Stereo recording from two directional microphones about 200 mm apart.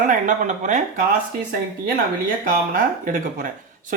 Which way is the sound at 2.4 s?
45° right (ahead or behind).